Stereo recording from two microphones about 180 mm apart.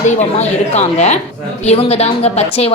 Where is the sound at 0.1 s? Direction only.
40° left (ahead or behind).